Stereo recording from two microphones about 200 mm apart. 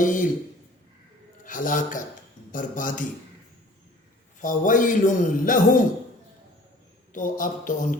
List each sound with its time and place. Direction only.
0.0 s a man's voice: 40° left (ahead or behind)
1.5 s a man's voice: 40° left (ahead or behind)
4.4 s a man's voice: 40° left (ahead or behind)
7.1 s a man's voice: 40° left (ahead or behind)